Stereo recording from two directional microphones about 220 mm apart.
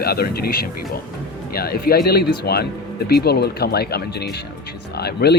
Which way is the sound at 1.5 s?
45° left (ahead or behind).